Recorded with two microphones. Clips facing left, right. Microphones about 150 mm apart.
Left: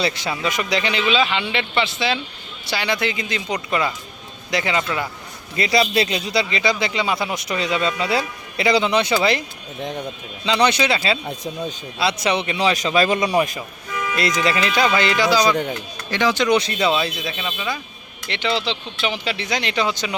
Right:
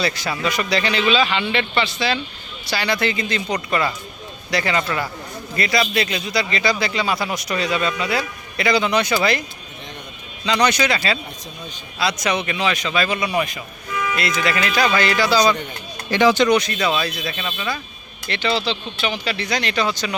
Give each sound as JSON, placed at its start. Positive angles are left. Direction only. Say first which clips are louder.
{"t": 0.0, "sound": "a man's voice", "louder": "even", "side_deg": 20}
{"t": 1.2, "sound": "a man's voice", "louder": "right 1 dB", "side_deg": 5}
{"t": 2.6, "sound": "speech", "louder": "right 1 dB", "side_deg": 20}
{"t": 5.5, "sound": "a man's voice", "louder": "left 2 dB", "side_deg": 25}
{"t": 10.4, "sound": "a man's voice", "louder": "even", "side_deg": 25}
{"t": 16.1, "sound": "speech", "louder": "right 4 dB", "side_deg": -5}
{"t": 16.5, "sound": "a man's voice", "louder": "even", "side_deg": 25}